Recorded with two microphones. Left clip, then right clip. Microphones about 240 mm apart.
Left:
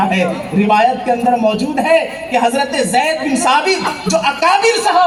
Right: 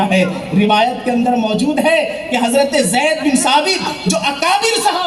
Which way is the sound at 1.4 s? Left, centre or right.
Right.